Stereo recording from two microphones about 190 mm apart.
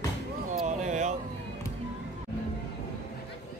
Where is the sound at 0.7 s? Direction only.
40° right (ahead or behind).